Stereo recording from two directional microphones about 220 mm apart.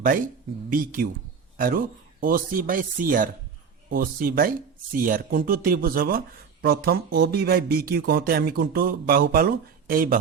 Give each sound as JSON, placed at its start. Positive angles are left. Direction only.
{"t": 0.7, "sound": "speech", "side_deg": -40}